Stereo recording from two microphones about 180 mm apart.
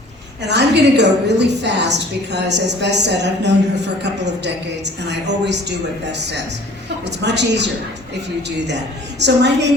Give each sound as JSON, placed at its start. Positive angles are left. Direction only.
{"t": 0.4, "sound": "a woman's voice", "side_deg": -70}
{"t": 5.5, "sound": "a woman's voice", "side_deg": -70}